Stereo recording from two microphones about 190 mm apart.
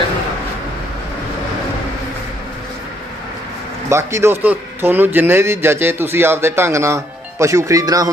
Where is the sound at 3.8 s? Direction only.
15° right (ahead or behind).